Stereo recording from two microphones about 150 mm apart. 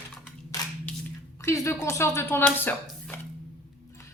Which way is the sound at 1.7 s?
15° left (ahead or behind).